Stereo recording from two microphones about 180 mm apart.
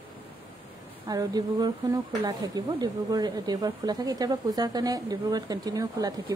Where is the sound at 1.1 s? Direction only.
20° right (ahead or behind).